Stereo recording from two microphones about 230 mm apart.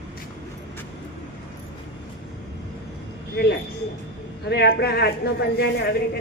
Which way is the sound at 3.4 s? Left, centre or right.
Left.